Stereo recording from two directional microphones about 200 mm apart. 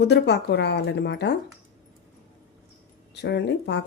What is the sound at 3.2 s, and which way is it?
Speech, 60° left (ahead or behind).